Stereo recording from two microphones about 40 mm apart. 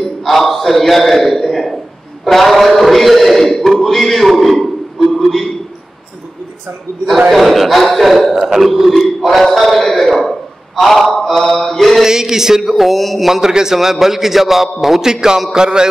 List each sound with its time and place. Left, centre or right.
0.0 s a sound: centre
7.2 s a man's voice: centre
11.1 s mantra: centre
12.0 s a man's voice: centre
12.7 s speech: centre
13.3 s a man's voice: centre
15.5 s music: centre